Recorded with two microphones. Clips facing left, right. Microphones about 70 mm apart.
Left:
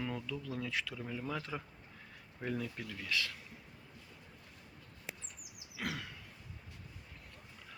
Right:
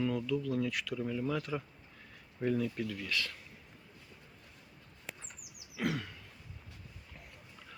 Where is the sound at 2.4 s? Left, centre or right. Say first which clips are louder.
Right 7 dB; centre.